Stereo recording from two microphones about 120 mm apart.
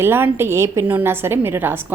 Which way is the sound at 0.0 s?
20° right (ahead or behind).